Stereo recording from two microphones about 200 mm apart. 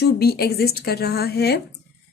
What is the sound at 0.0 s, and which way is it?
A woman's voice, 50° left (ahead or behind).